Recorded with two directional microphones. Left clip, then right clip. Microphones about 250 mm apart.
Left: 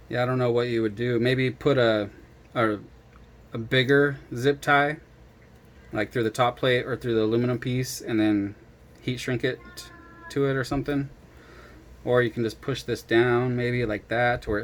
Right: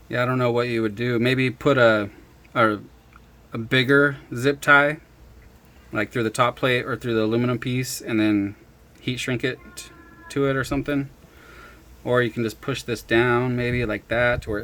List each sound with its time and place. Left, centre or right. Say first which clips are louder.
0.1 s speech: right 2 dB; centre
12.0 s speech: right 1 dB; centre